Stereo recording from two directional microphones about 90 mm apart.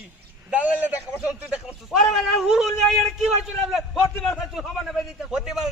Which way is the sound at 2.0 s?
Centre (ahead or behind).